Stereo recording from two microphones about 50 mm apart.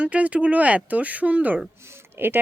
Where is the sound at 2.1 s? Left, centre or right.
Right.